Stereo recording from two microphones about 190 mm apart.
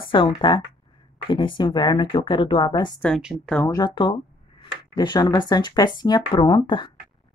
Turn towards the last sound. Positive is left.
turn(degrees=25)  # may be behind; listen again after turning